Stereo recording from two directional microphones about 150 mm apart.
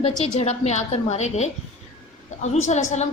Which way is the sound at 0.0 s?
45° left (ahead or behind).